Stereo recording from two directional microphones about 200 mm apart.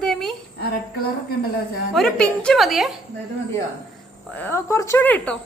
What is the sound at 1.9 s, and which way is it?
Speech, centre (ahead or behind).